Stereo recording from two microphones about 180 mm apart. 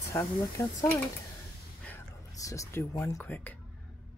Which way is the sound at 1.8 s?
15° left (ahead or behind).